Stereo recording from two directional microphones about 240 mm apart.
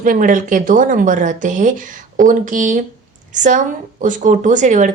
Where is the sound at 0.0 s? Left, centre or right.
Right.